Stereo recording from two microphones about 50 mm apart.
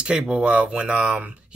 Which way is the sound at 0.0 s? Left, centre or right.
Centre.